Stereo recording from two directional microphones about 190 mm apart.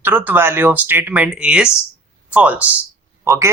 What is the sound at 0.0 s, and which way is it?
Speech, 10° right (ahead or behind).